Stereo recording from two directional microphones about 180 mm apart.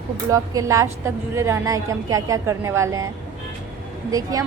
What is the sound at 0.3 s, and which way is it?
Speech, 20° right (ahead or behind).